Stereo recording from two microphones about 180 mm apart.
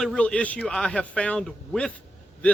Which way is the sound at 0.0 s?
5° left (ahead or behind).